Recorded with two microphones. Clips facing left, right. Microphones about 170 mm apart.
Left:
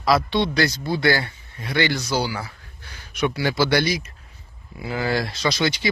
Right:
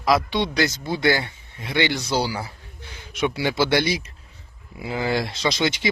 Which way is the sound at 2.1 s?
30° right (ahead or behind).